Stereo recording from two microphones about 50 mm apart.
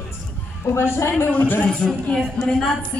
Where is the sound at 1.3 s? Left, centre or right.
Left.